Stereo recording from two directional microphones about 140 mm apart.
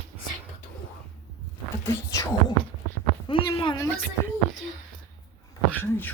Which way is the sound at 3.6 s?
30° left (ahead or behind).